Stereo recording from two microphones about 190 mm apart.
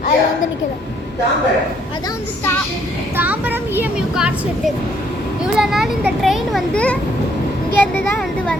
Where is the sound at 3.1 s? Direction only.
10° right (ahead or behind).